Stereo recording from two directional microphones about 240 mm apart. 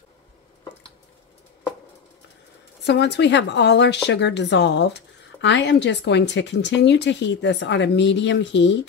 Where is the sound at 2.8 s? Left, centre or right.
Left.